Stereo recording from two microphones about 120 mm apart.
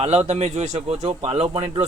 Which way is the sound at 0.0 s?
60° right (ahead or behind).